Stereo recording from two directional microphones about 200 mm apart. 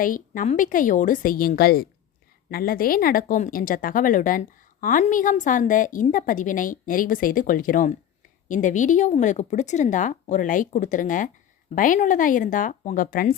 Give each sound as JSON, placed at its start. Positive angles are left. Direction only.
{"t": 0.0, "sound": "speech", "side_deg": 40}